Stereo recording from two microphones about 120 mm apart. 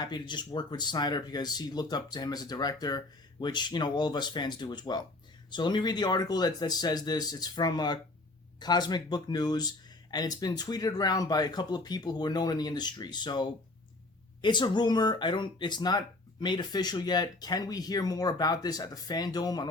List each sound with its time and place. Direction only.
0.0 s speech: 40° left (ahead or behind)